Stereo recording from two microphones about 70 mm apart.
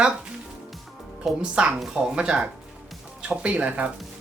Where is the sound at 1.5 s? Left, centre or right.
Centre.